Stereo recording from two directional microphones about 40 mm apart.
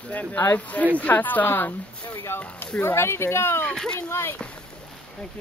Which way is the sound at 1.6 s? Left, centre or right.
Left.